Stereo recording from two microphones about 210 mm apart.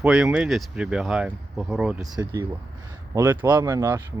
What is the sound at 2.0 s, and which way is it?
Speech, 20° right (ahead or behind).